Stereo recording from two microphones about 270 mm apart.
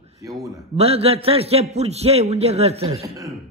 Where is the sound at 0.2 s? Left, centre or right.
Centre.